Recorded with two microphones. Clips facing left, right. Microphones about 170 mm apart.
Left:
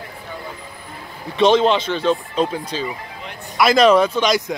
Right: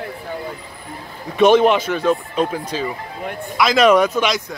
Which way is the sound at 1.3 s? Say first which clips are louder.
Right 2 dB; 10° right (ahead or behind).